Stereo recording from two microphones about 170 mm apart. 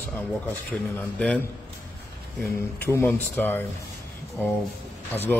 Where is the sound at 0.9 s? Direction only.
10° left (ahead or behind).